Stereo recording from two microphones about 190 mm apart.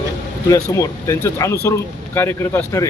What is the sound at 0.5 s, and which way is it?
Speech, 15° left (ahead or behind).